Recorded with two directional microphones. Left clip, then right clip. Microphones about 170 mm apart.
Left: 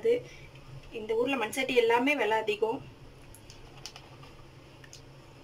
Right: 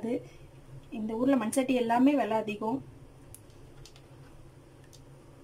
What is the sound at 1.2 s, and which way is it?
Speech, 90° right.